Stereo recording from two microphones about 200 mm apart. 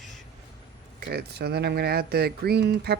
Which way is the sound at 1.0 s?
50° right (ahead or behind).